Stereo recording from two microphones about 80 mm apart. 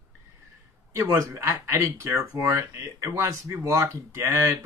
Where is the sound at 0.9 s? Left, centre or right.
Right.